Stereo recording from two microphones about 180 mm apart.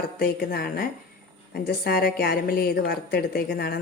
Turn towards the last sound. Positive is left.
turn(degrees=55)  # may be behind; listen again after turning